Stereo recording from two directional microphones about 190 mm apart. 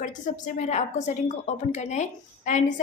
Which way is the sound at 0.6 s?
35° left (ahead or behind).